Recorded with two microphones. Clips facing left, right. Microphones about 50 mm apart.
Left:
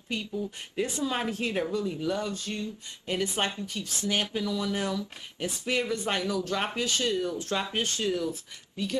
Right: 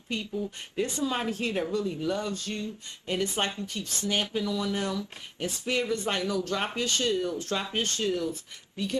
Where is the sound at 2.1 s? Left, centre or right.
Centre.